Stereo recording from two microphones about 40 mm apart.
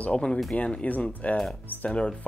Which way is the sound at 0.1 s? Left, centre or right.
Left.